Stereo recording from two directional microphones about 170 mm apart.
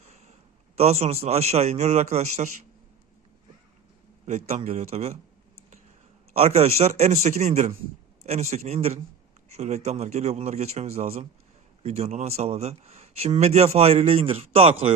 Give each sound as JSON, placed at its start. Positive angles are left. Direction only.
{"t": 0.0, "sound": "a sound", "side_deg": -40}
{"t": 0.8, "sound": "a man's voice", "side_deg": -40}
{"t": 4.3, "sound": "a man's voice", "side_deg": -40}
{"t": 6.3, "sound": "a man's voice", "side_deg": -40}